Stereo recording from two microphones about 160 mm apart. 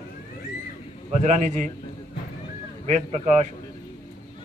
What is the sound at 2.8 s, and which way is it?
Speech, 45° right (ahead or behind).